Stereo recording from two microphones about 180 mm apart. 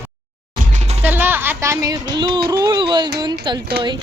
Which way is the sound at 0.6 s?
40° right (ahead or behind).